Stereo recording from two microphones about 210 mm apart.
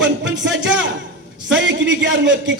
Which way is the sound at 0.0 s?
60° right (ahead or behind).